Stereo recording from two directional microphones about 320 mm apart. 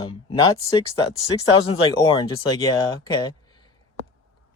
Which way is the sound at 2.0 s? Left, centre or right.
Centre.